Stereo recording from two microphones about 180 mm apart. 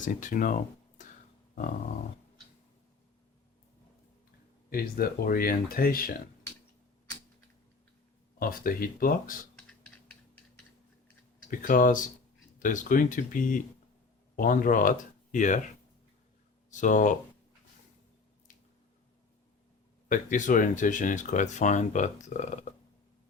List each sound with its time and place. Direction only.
0.0 s speech: 45° left (ahead or behind)
4.7 s speech: 55° left (ahead or behind)
8.4 s speech: 50° left (ahead or behind)
9.6 s a sound: 5° left (ahead or behind)
11.6 s speech: 50° left (ahead or behind)
16.7 s speech: 45° left (ahead or behind)
20.1 s speech: 45° left (ahead or behind)